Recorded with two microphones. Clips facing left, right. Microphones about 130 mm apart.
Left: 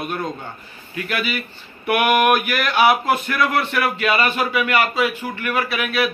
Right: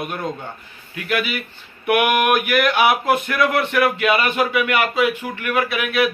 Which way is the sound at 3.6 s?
20° right (ahead or behind).